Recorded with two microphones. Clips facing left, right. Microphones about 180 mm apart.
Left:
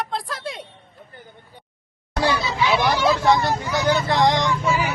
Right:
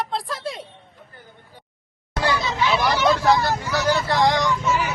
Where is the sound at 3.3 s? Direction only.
20° left (ahead or behind).